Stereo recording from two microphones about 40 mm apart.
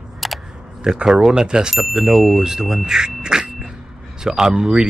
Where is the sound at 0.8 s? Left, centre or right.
Centre.